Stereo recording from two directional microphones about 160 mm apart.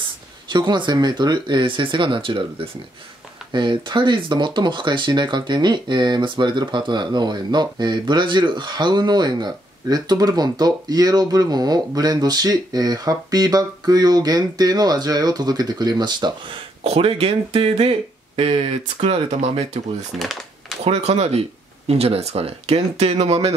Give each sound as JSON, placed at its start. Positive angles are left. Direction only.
{"t": 0.5, "sound": "speech", "side_deg": -30}
{"t": 20.2, "sound": "typing", "side_deg": 0}
{"t": 20.8, "sound": "speech", "side_deg": -40}